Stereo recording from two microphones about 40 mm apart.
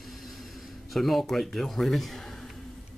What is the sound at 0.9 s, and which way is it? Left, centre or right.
Speech, centre.